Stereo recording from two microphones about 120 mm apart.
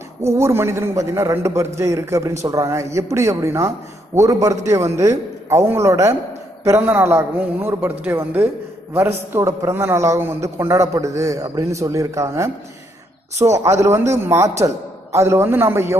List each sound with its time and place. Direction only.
0.2 s a man's voice: 25° right (ahead or behind)
13.5 s a man's voice: 25° right (ahead or behind)